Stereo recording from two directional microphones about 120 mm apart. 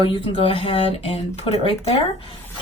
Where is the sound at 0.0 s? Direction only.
45° left (ahead or behind).